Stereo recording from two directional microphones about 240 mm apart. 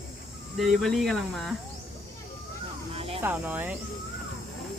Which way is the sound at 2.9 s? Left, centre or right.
Right.